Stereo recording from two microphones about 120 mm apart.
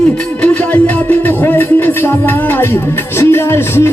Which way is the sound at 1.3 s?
15° left (ahead or behind).